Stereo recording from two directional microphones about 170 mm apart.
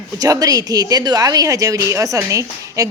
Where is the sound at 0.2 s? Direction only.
20° right (ahead or behind).